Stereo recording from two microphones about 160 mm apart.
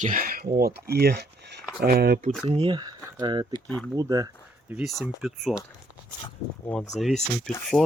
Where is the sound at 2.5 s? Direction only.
30° right (ahead or behind).